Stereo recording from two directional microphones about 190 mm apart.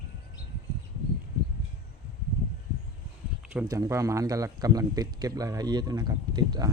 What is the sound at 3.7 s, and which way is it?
A man's voice, 15° right (ahead or behind).